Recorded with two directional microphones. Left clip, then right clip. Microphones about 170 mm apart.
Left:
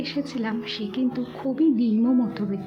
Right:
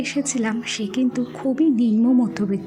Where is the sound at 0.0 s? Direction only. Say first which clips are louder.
Right 5 dB; 25° right (ahead or behind).